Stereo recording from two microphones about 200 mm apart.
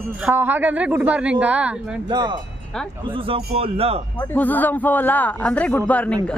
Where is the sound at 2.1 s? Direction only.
20° right (ahead or behind).